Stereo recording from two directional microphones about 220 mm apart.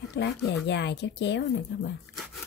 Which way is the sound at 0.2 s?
50° left (ahead or behind).